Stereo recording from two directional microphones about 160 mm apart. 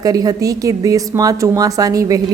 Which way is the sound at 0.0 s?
25° right (ahead or behind).